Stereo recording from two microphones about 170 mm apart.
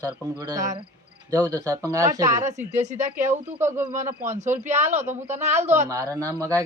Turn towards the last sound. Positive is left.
turn(degrees=-20)  # may be behind; listen again after turning